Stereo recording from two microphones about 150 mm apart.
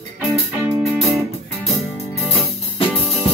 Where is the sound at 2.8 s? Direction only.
40° left (ahead or behind).